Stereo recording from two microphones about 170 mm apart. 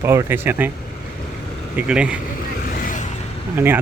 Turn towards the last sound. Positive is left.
turn(degrees=-10)  # may be behind; listen again after turning